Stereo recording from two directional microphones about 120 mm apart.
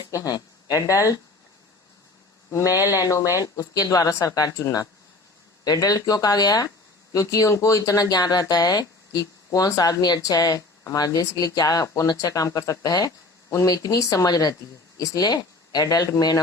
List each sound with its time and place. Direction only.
0.0 s speech: 30° left (ahead or behind)
2.5 s speech: 25° left (ahead or behind)